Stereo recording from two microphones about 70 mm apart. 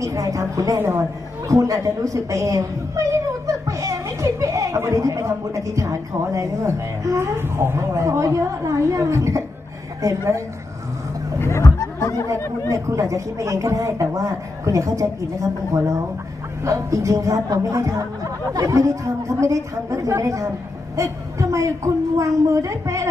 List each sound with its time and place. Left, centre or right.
0.0 s speech: right
0.7 s speech: right
1.5 s speech: right
7.3 s speech: right
11.3 s speech: left
12.3 s speech: right
16.6 s speech: right